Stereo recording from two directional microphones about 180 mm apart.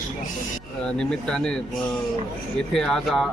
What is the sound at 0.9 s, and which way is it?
Speech, 5° left (ahead or behind).